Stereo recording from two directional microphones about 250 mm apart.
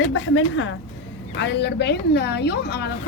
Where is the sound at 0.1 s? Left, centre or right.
Left.